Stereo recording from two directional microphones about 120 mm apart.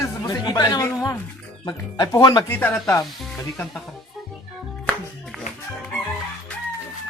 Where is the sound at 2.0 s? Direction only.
30° left (ahead or behind).